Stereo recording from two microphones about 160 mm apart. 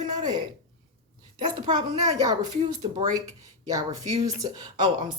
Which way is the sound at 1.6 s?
25° right (ahead or behind).